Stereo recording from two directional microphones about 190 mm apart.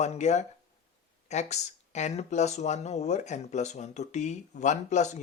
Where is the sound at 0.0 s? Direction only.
35° left (ahead or behind).